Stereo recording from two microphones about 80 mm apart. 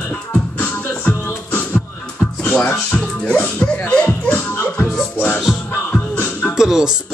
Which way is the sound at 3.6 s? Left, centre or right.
Left.